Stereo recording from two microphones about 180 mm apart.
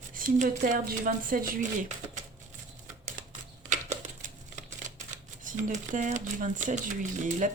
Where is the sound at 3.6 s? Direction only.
45° right (ahead or behind).